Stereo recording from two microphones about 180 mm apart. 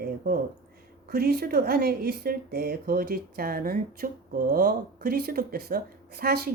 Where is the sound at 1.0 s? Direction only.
60° right (ahead or behind).